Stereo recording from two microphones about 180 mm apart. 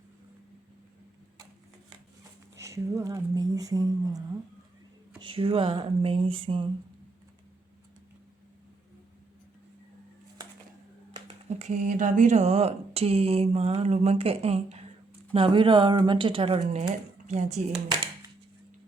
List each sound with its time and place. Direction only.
2.6 s speech: 15° right (ahead or behind)
5.2 s speech: 30° right (ahead or behind)
11.1 s speech: 35° right (ahead or behind)